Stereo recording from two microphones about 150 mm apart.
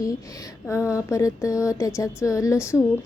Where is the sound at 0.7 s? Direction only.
20° left (ahead or behind).